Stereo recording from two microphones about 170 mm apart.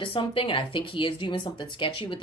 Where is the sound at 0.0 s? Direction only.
30° left (ahead or behind).